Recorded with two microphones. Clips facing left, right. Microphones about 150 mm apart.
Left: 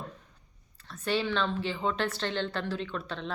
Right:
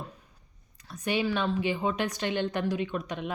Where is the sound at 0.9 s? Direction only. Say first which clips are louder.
Right 1 dB; 15° right (ahead or behind).